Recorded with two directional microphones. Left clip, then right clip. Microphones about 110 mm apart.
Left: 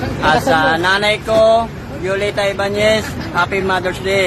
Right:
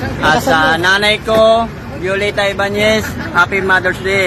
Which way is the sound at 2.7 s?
15° left (ahead or behind).